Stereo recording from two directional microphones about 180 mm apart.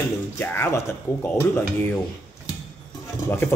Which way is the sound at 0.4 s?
15° left (ahead or behind).